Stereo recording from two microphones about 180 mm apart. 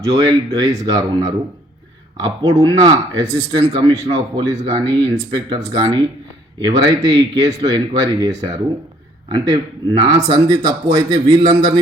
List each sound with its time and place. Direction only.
0.0 s speech: 20° right (ahead or behind)
2.6 s speech: 25° right (ahead or behind)